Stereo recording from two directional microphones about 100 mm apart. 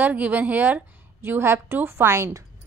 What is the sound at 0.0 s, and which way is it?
A woman's voice, 15° right (ahead or behind).